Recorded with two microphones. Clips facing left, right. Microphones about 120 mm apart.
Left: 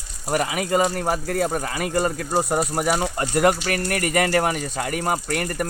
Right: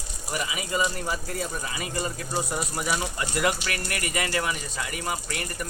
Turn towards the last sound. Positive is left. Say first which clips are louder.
# left 9 dB
turn(degrees=55)  # may be behind; listen again after turning